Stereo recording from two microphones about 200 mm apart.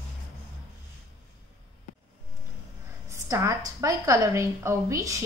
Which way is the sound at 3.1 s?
15° right (ahead or behind).